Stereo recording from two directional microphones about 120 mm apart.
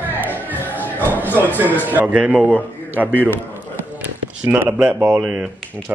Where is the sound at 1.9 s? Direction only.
15° right (ahead or behind).